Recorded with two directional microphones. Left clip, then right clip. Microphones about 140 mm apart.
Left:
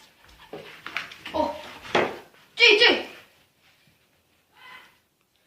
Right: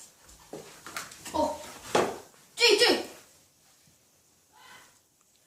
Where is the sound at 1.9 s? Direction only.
45° left (ahead or behind).